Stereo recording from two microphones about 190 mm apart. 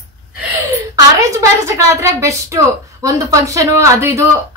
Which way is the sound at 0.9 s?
15° right (ahead or behind).